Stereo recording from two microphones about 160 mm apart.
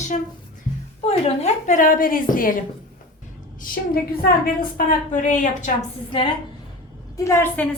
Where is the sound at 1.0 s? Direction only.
40° left (ahead or behind).